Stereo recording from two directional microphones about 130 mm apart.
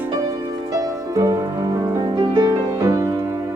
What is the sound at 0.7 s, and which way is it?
Music, 30° right (ahead or behind).